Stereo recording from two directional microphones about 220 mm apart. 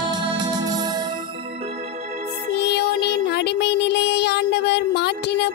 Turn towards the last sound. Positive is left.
turn(degrees=50)  # may be behind; listen again after turning